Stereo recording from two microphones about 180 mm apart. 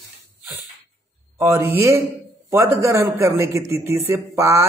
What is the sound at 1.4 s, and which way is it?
A man's voice, 15° right (ahead or behind).